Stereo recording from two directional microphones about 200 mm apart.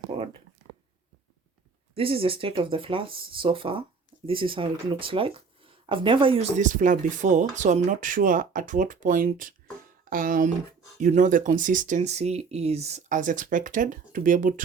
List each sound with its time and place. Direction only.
2.0 s speech: 30° right (ahead or behind)